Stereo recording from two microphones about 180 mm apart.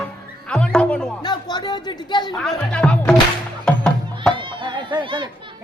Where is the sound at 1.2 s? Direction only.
25° left (ahead or behind).